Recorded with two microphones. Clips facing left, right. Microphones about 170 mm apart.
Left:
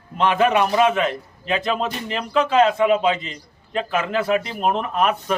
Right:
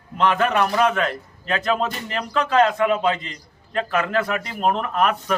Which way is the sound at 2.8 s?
20° left (ahead or behind).